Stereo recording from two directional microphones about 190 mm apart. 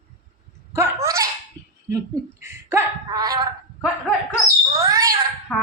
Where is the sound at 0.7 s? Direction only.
15° right (ahead or behind).